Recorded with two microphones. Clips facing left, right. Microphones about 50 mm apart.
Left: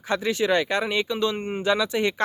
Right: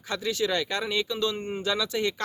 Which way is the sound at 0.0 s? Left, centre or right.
Left.